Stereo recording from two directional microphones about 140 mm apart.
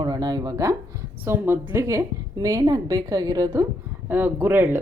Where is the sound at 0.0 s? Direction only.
30° right (ahead or behind).